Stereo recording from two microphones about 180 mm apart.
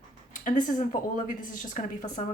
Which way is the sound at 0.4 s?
45° left (ahead or behind).